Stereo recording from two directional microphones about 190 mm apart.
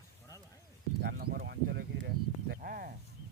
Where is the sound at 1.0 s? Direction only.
55° right (ahead or behind).